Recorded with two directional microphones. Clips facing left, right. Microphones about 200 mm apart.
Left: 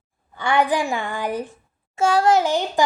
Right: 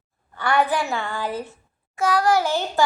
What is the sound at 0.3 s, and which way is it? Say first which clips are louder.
A child's voice: left 1 dB; 15° left (ahead or behind).